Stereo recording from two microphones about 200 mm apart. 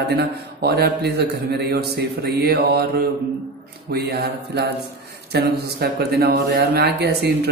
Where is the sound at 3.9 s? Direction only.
55° right (ahead or behind).